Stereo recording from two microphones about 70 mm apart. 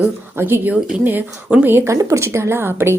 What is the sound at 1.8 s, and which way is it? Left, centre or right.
Speech, right.